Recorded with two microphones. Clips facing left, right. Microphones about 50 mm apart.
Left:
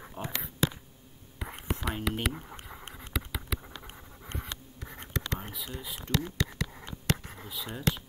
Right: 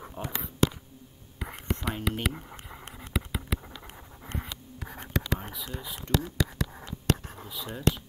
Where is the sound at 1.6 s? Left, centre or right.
Centre.